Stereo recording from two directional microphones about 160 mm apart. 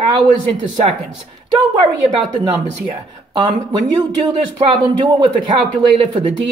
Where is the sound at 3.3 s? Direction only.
25° right (ahead or behind).